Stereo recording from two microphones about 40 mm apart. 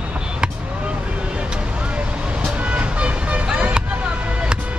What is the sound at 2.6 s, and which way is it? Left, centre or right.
Vehicle, right.